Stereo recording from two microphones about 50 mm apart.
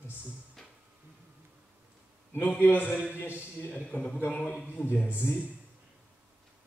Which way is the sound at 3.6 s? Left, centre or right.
Left.